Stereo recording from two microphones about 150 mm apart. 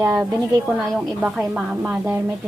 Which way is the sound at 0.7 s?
5° right (ahead or behind).